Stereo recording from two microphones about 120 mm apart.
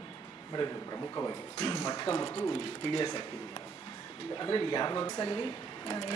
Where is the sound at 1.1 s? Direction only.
25° left (ahead or behind).